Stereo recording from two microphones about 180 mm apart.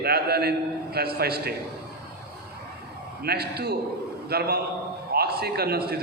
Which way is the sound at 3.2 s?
60° right (ahead or behind).